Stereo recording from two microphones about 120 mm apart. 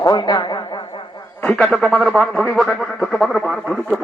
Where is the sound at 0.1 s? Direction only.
35° left (ahead or behind).